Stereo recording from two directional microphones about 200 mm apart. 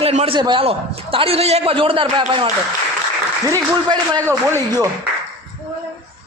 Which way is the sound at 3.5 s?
15° right (ahead or behind).